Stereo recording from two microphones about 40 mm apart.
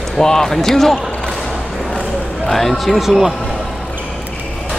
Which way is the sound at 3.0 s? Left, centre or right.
Centre.